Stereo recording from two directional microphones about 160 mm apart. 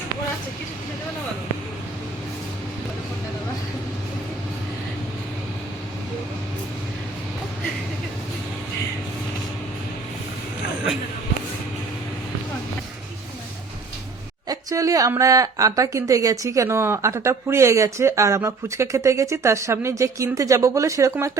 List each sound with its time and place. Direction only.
14.4 s speech: 20° right (ahead or behind)